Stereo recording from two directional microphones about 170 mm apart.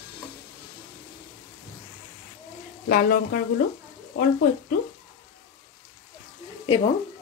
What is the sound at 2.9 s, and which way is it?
Speech, 60° left (ahead or behind).